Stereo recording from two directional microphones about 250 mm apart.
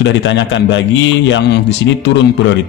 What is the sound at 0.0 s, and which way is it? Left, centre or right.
Speech, left.